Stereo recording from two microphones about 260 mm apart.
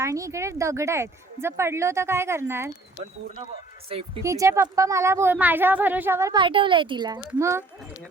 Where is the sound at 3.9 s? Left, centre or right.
Centre.